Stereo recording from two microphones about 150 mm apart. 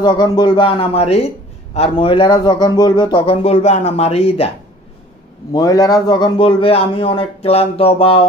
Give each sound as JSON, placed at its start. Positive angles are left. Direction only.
{"t": 0.0, "sound": "a man's voice", "side_deg": 30}
{"t": 5.5, "sound": "a man's voice", "side_deg": 25}